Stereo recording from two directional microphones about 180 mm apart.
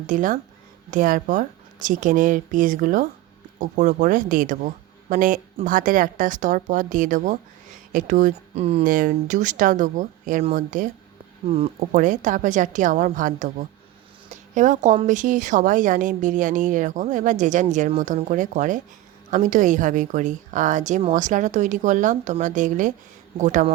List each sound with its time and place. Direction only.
0.1 s a woman's voice: 50° right (ahead or behind)
8.8 s a woman's voice: 50° right (ahead or behind)
11.5 s a woman's voice: 35° right (ahead or behind)
14.3 s a sound: 45° right (ahead or behind)
15.0 s a woman's voice: 45° right (ahead or behind)